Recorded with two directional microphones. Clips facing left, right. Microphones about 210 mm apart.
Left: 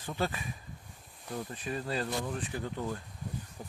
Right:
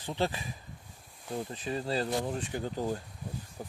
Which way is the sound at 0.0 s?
25° right (ahead or behind).